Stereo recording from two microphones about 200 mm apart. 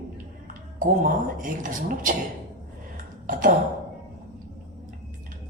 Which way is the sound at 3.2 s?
40° right (ahead or behind).